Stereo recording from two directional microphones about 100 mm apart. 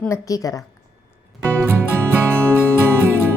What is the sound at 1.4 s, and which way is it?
Music, 20° right (ahead or behind).